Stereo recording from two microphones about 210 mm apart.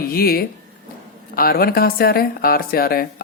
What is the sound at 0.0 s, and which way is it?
Speech, 45° left (ahead or behind).